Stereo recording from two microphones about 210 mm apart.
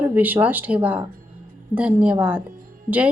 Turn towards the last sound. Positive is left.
turn(degrees=-10)  # may be behind; listen again after turning